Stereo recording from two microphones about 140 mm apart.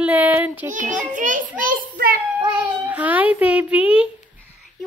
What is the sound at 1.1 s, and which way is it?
Speech, 65° right (ahead or behind).